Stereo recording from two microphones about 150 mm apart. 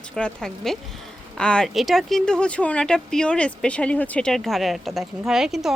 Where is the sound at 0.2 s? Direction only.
5° left (ahead or behind).